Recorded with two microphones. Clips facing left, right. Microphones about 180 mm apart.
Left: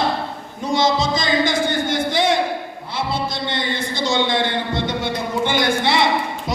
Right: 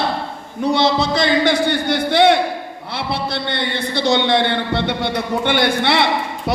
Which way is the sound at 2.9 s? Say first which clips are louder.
Right 1 dB; 65° right (ahead or behind).